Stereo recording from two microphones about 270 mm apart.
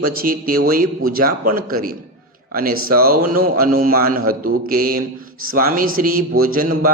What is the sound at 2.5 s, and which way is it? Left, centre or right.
A man's voice, right.